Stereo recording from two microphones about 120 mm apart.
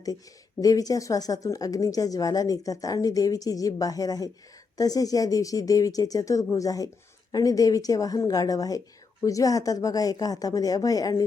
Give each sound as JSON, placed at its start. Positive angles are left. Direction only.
{"t": 0.6, "sound": "a woman's voice", "side_deg": 30}